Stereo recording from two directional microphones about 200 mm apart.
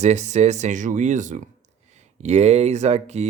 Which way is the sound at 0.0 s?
35° right (ahead or behind).